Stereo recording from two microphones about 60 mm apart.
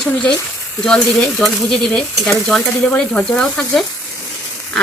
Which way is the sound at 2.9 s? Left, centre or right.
Centre.